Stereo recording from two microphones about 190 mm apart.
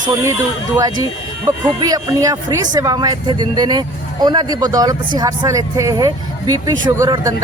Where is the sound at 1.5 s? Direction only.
15° right (ahead or behind).